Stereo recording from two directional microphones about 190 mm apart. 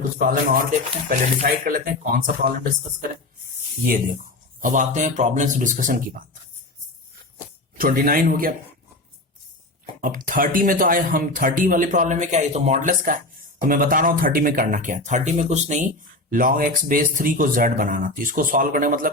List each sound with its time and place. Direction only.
0.2 s speech: 50° right (ahead or behind)
4.6 s speech: 40° right (ahead or behind)
7.8 s speech: 50° right (ahead or behind)
10.0 s speech: 45° right (ahead or behind)